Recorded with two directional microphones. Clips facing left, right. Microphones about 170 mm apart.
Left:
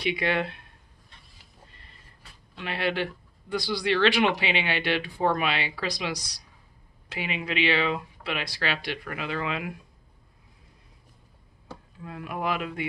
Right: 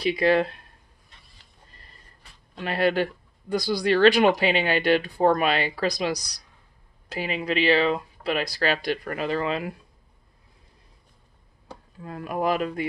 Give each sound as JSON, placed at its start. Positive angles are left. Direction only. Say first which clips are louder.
{"t": 0.0, "sound": "speech", "louder": "right 6 dB", "side_deg": -40}
{"t": 2.5, "sound": "speech", "louder": "right 6 dB", "side_deg": -40}
{"t": 12.0, "sound": "speech", "louder": "right 5 dB", "side_deg": -40}